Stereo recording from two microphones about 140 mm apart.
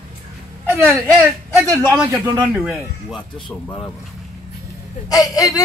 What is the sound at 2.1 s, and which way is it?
Speech, 30° right (ahead or behind).